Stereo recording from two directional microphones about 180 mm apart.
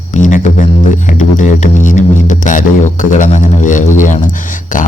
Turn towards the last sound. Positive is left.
turn(degrees=45)  # may be behind; listen again after turning